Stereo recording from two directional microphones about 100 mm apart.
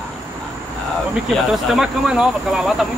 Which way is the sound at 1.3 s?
Centre (ahead or behind).